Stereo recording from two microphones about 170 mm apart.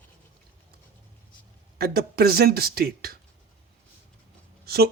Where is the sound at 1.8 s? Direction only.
65° right (ahead or behind).